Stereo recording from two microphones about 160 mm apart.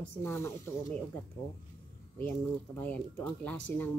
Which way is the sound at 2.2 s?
10° left (ahead or behind).